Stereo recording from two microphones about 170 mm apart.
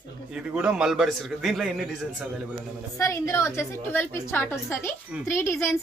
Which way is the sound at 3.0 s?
15° left (ahead or behind).